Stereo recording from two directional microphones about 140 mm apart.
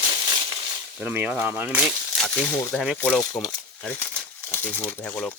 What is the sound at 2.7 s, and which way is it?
Speech, centre (ahead or behind).